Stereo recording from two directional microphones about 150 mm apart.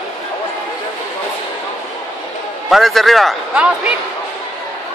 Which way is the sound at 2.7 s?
Centre (ahead or behind).